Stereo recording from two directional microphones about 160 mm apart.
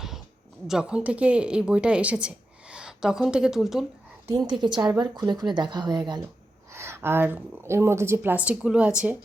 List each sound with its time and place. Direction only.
0.7 s a woman's voice: 5° right (ahead or behind)
4.3 s a woman's voice: 25° right (ahead or behind); by 9.1 s 5° right (ahead or behind)